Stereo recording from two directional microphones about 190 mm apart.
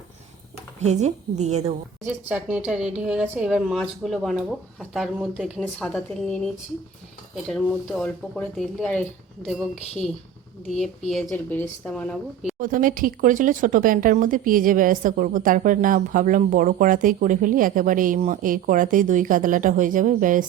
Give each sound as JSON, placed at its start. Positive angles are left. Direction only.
{"t": 0.8, "sound": "a woman's voice", "side_deg": -35}
{"t": 2.3, "sound": "a woman's voice", "side_deg": -5}
{"t": 7.6, "sound": "a woman's voice", "side_deg": 0}
{"t": 12.5, "sound": "speech", "side_deg": -45}